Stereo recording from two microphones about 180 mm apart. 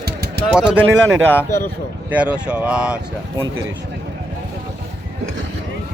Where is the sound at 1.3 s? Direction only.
15° left (ahead or behind).